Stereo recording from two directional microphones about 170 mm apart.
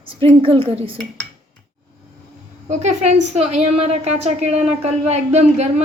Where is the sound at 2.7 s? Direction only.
40° right (ahead or behind).